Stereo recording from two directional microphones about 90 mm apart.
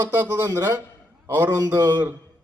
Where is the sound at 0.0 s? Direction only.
20° right (ahead or behind).